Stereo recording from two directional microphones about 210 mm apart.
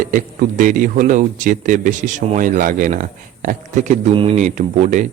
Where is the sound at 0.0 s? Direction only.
40° right (ahead or behind).